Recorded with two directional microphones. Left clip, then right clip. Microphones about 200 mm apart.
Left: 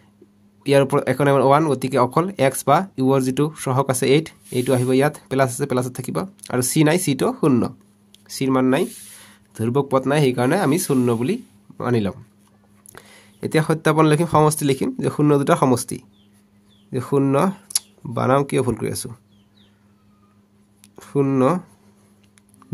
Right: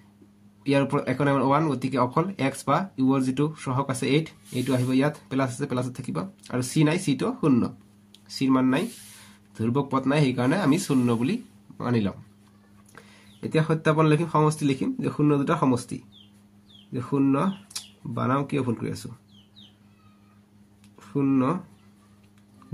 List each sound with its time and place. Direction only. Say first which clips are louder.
0.7 s speech: left 7 dB; 45° left (ahead or behind)
21.0 s speech: left 6 dB; 50° left (ahead or behind)